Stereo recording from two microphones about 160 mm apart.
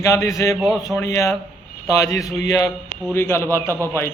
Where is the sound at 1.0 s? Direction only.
20° left (ahead or behind).